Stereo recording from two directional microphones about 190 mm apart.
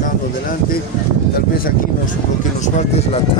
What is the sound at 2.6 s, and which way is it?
Speech, 35° left (ahead or behind).